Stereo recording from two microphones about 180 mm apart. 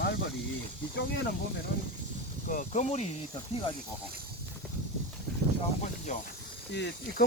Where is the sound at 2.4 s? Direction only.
45° left (ahead or behind).